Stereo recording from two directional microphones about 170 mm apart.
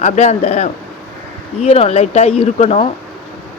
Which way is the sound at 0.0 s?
40° left (ahead or behind).